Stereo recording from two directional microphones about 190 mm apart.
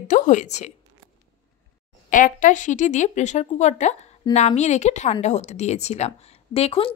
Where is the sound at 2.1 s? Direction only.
45° left (ahead or behind).